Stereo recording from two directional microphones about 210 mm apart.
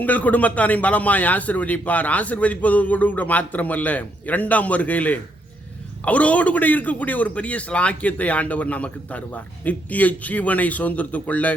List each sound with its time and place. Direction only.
0.0 s a man's voice: 5° left (ahead or behind)